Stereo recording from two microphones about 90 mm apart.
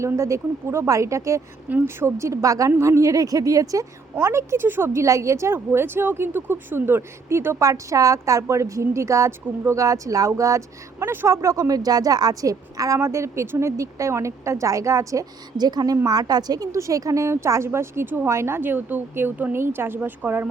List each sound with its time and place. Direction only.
0.0 s a woman's voice: 35° right (ahead or behind)